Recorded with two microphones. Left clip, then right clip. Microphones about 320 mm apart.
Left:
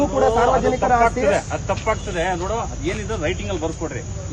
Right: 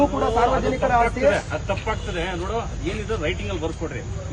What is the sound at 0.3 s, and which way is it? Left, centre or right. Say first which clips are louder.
Speech: left 4 dB; centre.